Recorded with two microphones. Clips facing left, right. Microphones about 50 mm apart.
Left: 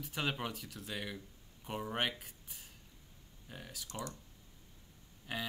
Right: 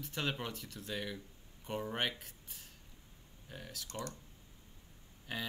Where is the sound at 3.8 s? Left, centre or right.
Centre.